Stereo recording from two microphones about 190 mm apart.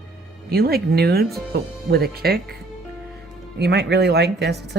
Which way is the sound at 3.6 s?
60° right (ahead or behind).